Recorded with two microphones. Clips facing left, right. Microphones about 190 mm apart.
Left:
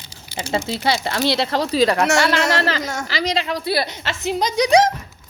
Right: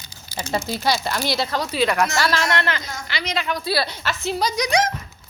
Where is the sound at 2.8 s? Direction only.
75° left (ahead or behind).